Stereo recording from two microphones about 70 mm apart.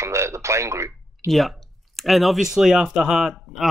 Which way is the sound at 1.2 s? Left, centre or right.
Centre.